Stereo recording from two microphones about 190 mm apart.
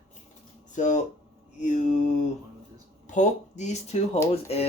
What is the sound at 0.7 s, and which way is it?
Speech, 40° left (ahead or behind).